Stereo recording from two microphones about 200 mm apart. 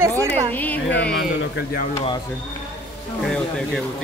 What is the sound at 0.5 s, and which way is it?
Music, 10° left (ahead or behind).